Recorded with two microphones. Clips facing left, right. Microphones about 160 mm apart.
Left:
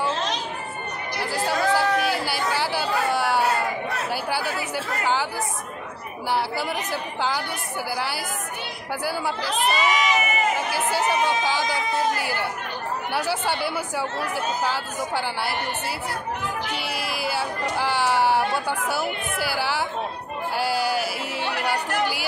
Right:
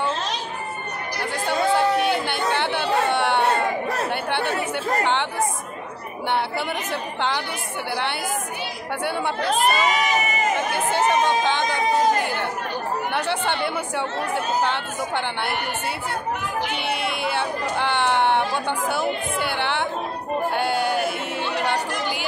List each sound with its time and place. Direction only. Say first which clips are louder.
1.2 s speech: even; 5° left (ahead or behind)
1.8 s chatter: right 2 dB; 5° left (ahead or behind)
3.1 s a sound: right 2 dB; centre (ahead or behind)
4.1 s speech: right 2 dB; 5° left (ahead or behind)
6.9 s speech: right 1 dB; 5° left (ahead or behind)
9.4 s speech: right 4 dB; 45° right (ahead or behind)
10.5 s speech: right 2 dB; 5° left (ahead or behind)
16.7 s speech: right 3 dB; 5° left (ahead or behind)